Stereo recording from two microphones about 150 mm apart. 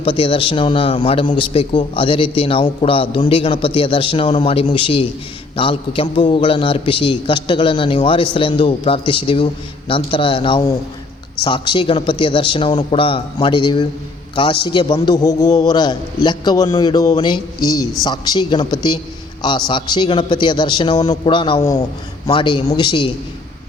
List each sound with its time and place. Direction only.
0.0 s a man's voice: 35° left (ahead or behind)